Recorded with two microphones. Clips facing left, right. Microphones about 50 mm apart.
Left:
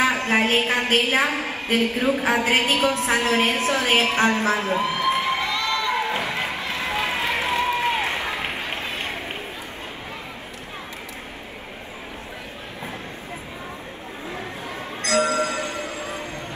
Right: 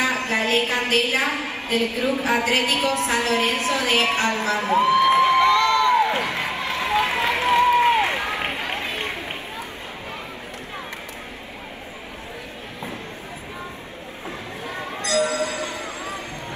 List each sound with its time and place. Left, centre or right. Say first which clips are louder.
0.0 s a woman's voice: left 2 dB; left
4.6 s crowd: right 5 dB; right
6.5 s run: right 3 dB; right
15.0 s music: left 1 dB; left